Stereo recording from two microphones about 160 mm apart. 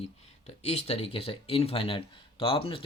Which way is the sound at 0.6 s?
40° left (ahead or behind).